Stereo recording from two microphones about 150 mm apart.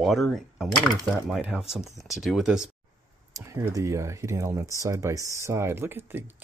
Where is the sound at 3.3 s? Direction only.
20° right (ahead or behind).